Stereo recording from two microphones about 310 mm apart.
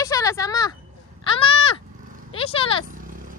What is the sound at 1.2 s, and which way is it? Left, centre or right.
Goat, centre.